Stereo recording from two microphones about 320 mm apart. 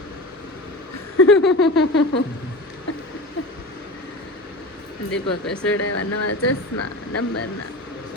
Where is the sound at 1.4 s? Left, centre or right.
Centre.